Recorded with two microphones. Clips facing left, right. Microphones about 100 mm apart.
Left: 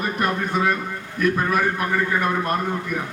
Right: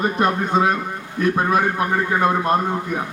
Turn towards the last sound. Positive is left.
turn(degrees=-25)  # may be behind; listen again after turning